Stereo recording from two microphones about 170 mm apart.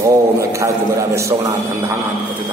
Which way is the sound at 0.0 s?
15° right (ahead or behind).